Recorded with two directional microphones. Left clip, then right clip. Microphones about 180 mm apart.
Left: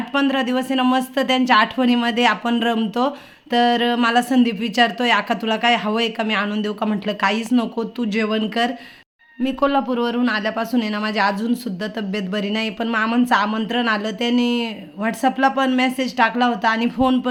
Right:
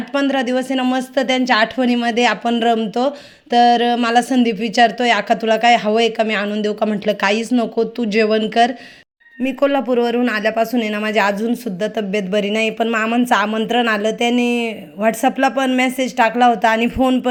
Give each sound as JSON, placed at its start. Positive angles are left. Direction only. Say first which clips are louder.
{"t": 0.1, "sound": "speech", "louder": "right 2 dB", "side_deg": -10}
{"t": 12.9, "sound": "speech", "louder": "right 2 dB", "side_deg": 0}
{"t": 13.2, "sound": "speech", "louder": "right 2 dB", "side_deg": -15}